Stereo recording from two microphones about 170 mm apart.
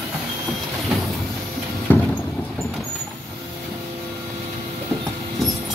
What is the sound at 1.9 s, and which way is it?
Vehicle, 10° left (ahead or behind).